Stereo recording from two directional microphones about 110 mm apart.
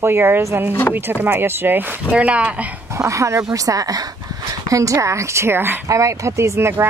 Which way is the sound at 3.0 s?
25° right (ahead or behind).